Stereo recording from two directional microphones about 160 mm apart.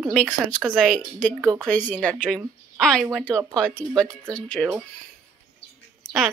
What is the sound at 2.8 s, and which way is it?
A woman's voice, centre (ahead or behind).